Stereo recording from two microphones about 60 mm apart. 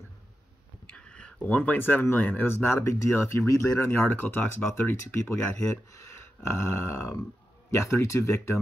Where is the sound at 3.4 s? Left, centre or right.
Left.